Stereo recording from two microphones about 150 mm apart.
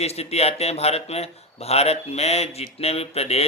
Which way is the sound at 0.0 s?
45° left (ahead or behind).